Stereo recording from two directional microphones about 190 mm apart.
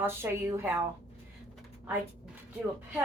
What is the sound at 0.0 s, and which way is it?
Speech, 10° right (ahead or behind).